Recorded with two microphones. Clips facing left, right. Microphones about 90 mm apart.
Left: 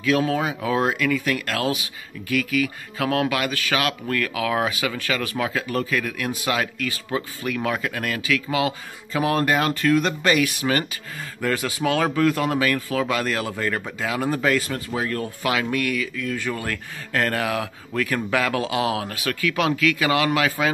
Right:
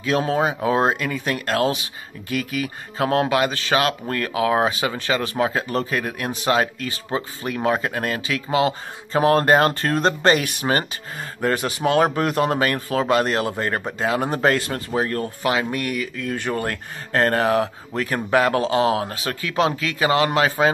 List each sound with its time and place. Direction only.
0.0 s speech: 35° right (ahead or behind)
11.4 s speech: 30° right (ahead or behind)